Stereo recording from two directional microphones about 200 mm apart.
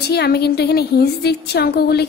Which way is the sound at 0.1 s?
55° left (ahead or behind).